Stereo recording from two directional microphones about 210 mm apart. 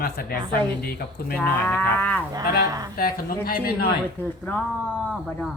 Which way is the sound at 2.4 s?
50° left (ahead or behind).